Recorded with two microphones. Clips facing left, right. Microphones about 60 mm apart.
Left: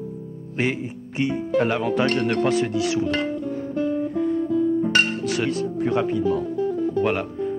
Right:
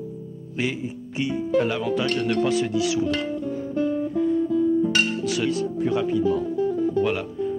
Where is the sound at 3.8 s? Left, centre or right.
Left.